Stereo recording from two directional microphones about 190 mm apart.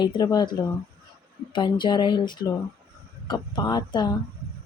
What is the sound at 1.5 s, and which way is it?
Speech, 25° left (ahead or behind).